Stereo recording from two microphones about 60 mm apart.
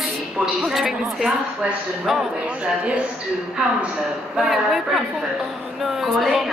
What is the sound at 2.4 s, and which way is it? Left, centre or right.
A man's voice, right.